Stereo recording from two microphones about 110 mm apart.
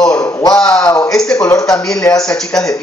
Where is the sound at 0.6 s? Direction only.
5° left (ahead or behind).